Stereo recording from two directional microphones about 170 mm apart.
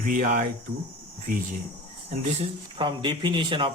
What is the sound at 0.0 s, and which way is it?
Speech, 55° right (ahead or behind).